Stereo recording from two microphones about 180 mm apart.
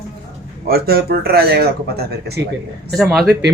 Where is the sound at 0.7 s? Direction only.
60° right (ahead or behind).